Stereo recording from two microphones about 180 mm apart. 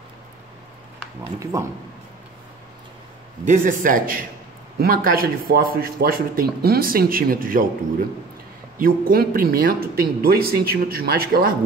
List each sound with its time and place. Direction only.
1.4 s speech: 15° right (ahead or behind)
3.4 s a man's voice: 45° right (ahead or behind)
8.7 s speech: 50° right (ahead or behind)